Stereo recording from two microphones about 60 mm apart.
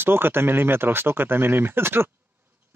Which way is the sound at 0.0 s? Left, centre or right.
Right.